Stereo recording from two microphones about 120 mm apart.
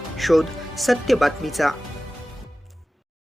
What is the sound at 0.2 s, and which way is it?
Speech, centre (ahead or behind).